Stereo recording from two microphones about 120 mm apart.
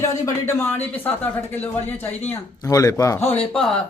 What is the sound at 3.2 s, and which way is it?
Speech, 65° left (ahead or behind).